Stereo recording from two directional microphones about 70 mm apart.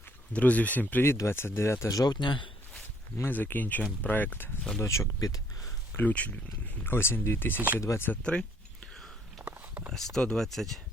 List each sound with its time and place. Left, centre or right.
0.3 s speech: left
1.3 s speech: left
1.9 s speech: left
3.2 s speech: left
4.8 s speech: left
5.3 s speech: left
6.0 s speech: left
6.8 s speech: left
7.5 s speech: right
8.1 s speech: centre
9.4 s a sound: right
9.9 s speech: centre